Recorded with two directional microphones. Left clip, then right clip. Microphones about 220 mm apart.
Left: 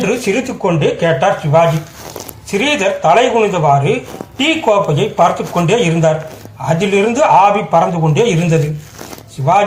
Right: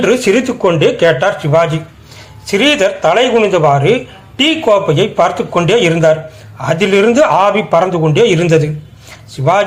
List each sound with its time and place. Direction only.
0.0 s a man's voice: 45° right (ahead or behind)